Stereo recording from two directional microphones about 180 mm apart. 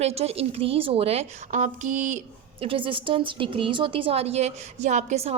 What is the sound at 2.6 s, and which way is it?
A woman's voice, 30° right (ahead or behind).